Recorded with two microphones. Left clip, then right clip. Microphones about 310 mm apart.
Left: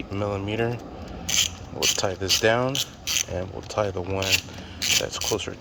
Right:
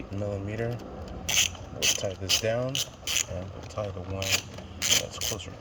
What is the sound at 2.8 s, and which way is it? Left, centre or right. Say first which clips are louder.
Mechanisms: left 3 dB; right.